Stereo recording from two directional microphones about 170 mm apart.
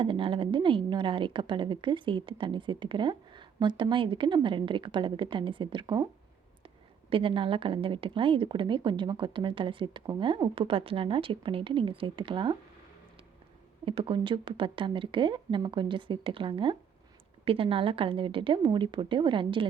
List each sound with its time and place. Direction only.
0.0 s a woman's voice: 30° right (ahead or behind)
7.1 s a woman's voice: 30° right (ahead or behind)
13.8 s a woman's voice: 30° right (ahead or behind)